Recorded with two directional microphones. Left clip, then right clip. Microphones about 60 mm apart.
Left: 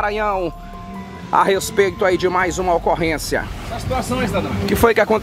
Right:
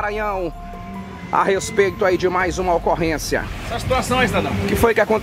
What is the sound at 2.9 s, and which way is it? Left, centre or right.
Speech, centre.